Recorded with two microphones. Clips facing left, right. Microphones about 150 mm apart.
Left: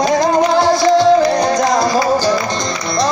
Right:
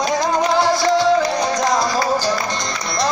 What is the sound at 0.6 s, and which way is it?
Music, 25° left (ahead or behind).